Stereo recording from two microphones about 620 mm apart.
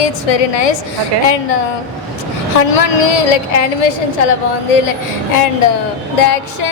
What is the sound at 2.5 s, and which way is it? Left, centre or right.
A woman's voice, left.